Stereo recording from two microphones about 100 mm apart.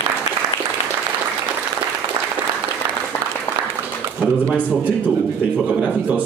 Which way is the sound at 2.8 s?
40° right (ahead or behind).